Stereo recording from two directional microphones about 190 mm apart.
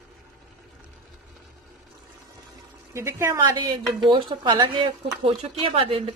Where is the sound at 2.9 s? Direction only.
15° right (ahead or behind).